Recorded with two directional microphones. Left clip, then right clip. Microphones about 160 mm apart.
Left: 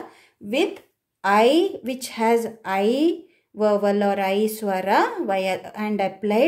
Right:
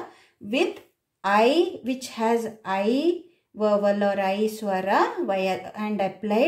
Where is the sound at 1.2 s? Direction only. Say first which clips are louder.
Left 3 dB; 30° left (ahead or behind).